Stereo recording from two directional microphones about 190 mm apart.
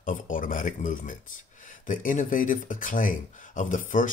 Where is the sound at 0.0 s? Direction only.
45° left (ahead or behind).